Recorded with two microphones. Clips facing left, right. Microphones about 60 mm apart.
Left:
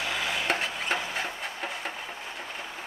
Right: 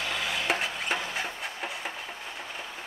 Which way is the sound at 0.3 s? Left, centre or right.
Centre.